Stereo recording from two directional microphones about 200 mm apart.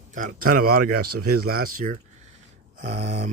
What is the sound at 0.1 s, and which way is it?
Speech, 40° right (ahead or behind).